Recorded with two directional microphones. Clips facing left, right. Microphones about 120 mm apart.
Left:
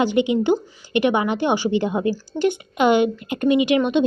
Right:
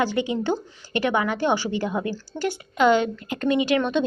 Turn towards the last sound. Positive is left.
turn(degrees=15)  # may be behind; listen again after turning